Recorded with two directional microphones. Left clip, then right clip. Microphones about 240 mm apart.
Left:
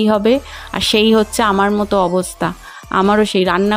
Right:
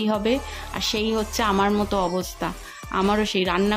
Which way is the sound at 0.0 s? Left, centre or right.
Left.